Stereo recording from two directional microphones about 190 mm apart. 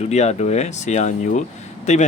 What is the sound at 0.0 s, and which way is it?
Speech, 35° left (ahead or behind).